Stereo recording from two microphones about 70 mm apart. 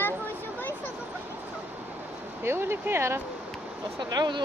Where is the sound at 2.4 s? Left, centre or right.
Right.